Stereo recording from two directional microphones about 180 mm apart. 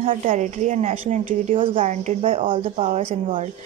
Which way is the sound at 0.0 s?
30° right (ahead or behind).